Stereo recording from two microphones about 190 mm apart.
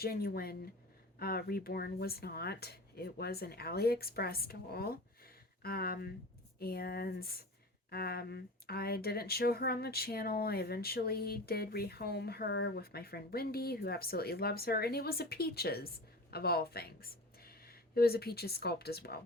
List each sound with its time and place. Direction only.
0.0 s speech: 55° left (ahead or behind)